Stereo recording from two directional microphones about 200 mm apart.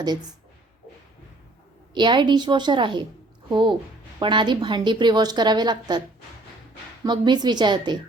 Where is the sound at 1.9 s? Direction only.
20° right (ahead or behind).